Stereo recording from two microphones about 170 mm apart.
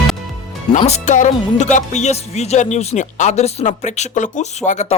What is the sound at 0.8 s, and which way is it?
Speech, 40° left (ahead or behind).